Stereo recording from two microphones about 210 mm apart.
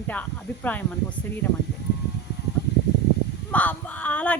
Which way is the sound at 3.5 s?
5° left (ahead or behind).